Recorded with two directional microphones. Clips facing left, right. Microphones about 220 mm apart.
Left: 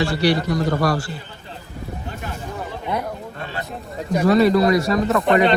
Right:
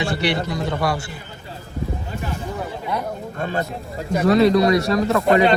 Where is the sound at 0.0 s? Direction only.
20° right (ahead or behind).